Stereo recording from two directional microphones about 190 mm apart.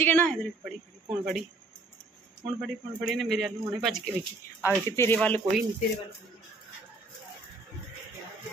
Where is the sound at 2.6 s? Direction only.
Centre (ahead or behind).